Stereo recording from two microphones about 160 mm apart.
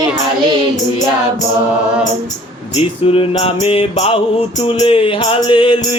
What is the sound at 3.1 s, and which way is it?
Music, 35° left (ahead or behind).